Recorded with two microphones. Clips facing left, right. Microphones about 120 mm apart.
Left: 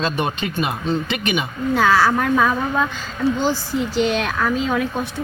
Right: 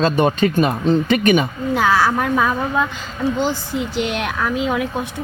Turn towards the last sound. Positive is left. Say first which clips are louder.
# even
turn(degrees=-15)  # may be behind; listen again after turning